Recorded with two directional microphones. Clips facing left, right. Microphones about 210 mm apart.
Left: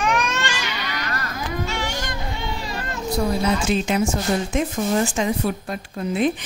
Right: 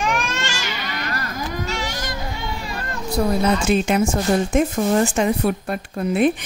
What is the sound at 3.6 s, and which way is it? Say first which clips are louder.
Speech: right 3 dB; 55° right (ahead or behind).